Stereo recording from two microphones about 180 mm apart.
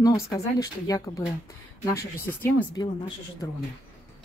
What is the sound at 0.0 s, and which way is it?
A woman's voice, 20° left (ahead or behind).